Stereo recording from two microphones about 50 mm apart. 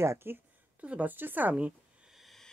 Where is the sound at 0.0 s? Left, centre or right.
Right.